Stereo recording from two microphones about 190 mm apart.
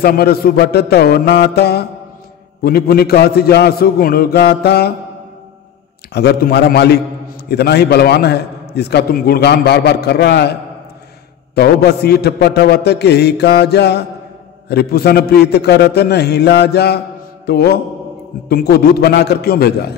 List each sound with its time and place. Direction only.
0.0 s a man's voice: 55° left (ahead or behind)
6.1 s a man's voice: 60° left (ahead or behind)
11.5 s a man's voice: 60° left (ahead or behind)